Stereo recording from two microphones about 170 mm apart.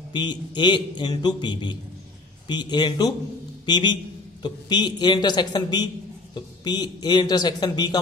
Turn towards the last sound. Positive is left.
turn(degrees=25)  # may be behind; listen again after turning